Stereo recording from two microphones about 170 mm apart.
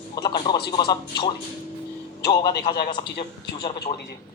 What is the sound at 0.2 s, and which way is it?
A man's voice, 25° left (ahead or behind).